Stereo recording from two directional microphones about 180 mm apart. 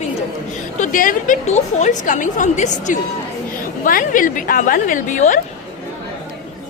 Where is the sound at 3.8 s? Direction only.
50° left (ahead or behind).